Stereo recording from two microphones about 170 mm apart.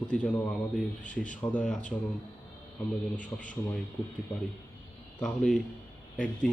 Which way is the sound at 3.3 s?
15° left (ahead or behind).